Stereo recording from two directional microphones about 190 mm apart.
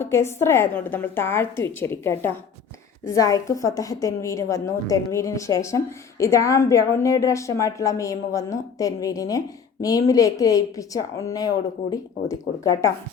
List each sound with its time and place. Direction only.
0.0 s a woman's voice: 15° left (ahead or behind)